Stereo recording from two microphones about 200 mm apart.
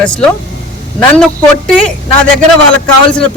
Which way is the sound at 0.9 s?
5° left (ahead or behind).